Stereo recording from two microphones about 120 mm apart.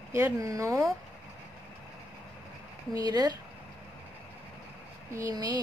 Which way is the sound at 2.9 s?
35° right (ahead or behind).